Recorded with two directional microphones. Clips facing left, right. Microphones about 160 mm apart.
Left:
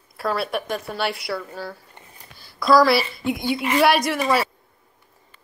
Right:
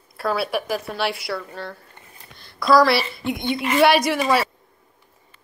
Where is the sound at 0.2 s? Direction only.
Centre (ahead or behind).